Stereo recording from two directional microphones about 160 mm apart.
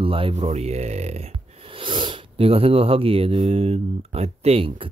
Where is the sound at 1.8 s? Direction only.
30° right (ahead or behind).